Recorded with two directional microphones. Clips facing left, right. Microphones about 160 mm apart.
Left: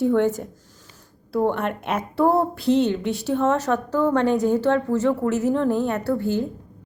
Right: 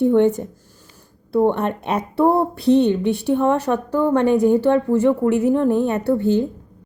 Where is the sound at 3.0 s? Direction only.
60° right (ahead or behind).